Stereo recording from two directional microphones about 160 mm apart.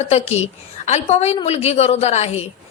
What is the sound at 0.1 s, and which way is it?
A woman's voice, 40° left (ahead or behind).